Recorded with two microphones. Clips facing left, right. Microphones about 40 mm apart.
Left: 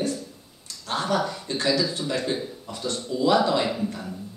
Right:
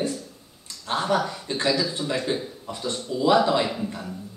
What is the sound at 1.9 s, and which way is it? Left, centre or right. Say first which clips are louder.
Speech: right 1 dB; right.